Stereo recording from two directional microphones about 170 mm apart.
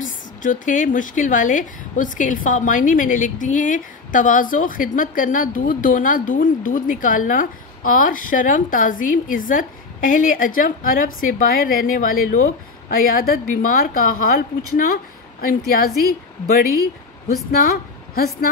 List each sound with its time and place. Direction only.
0.4 s a woman's voice: 50° left (ahead or behind)
15.4 s a woman's voice: 60° left (ahead or behind)